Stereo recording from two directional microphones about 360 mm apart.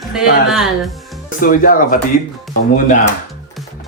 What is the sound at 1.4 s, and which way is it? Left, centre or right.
Speech, left.